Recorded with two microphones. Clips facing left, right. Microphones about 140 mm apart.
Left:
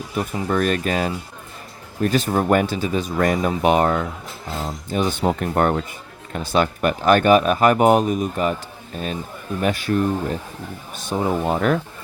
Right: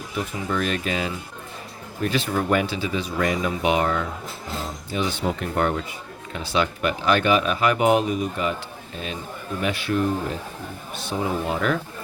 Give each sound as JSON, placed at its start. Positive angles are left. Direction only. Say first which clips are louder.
{"t": 0.2, "sound": "speech", "louder": "left 5 dB", "side_deg": 50}
{"t": 9.6, "sound": "speech", "louder": "left 3 dB", "side_deg": 40}